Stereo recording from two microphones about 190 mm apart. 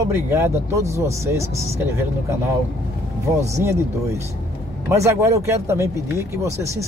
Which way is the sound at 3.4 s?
15° right (ahead or behind).